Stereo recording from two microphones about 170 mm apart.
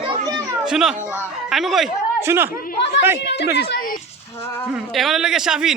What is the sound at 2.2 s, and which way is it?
Speech, 15° right (ahead or behind).